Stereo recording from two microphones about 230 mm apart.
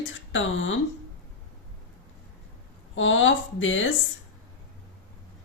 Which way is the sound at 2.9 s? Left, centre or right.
Left.